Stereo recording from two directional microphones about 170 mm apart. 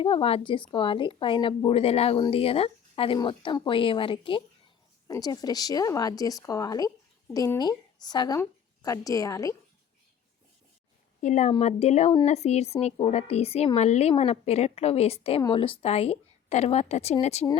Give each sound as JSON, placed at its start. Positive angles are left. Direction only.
{"t": 0.0, "sound": "speech", "side_deg": 30}
{"t": 11.2, "sound": "a woman's voice", "side_deg": 45}